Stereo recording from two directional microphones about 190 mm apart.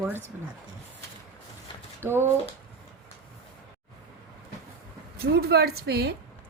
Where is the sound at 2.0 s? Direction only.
10° right (ahead or behind).